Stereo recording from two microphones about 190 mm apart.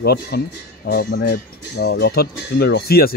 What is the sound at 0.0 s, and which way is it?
Speech, 55° left (ahead or behind).